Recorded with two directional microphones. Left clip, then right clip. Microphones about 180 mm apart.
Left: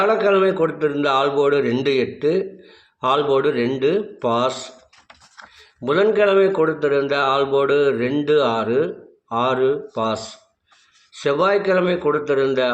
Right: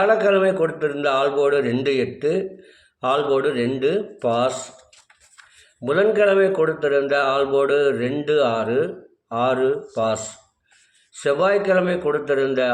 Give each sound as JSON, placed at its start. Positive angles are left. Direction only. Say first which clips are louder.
{"t": 0.0, "sound": "a man's voice", "louder": "even", "side_deg": 15}
{"t": 11.2, "sound": "a man's voice", "louder": "left 1 dB", "side_deg": 20}